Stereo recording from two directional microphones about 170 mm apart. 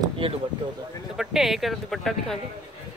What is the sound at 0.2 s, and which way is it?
Speech, 35° right (ahead or behind).